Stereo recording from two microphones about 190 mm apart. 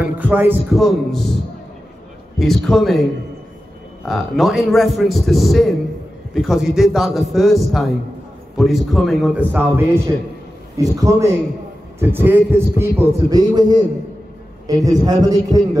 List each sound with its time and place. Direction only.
0.0 s a man's voice: 10° right (ahead or behind)
4.0 s a man's voice: centre (ahead or behind); by 15.8 s 20° right (ahead or behind)